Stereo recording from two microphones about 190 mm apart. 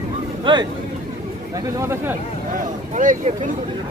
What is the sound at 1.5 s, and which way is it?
Chatter, 15° right (ahead or behind).